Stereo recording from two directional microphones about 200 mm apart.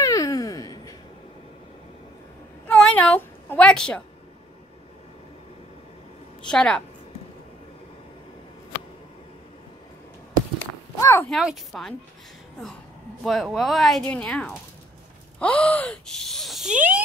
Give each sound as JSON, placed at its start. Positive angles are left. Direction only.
{"t": 0.0, "sound": "a sound", "side_deg": 15}
{"t": 2.6, "sound": "baby cry", "side_deg": 5}
{"t": 6.4, "sound": "speech", "side_deg": 5}
{"t": 11.0, "sound": "cat", "side_deg": 15}
{"t": 11.2, "sound": "speech", "side_deg": 0}
{"t": 13.2, "sound": "speech", "side_deg": 0}